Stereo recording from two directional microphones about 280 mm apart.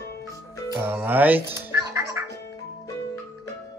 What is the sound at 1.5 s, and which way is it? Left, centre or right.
Music, centre.